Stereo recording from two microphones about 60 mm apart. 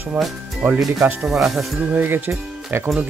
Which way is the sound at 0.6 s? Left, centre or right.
Right.